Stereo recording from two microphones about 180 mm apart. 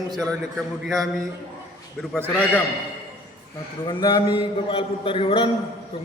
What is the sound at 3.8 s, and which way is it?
A man's voice, 25° left (ahead or behind).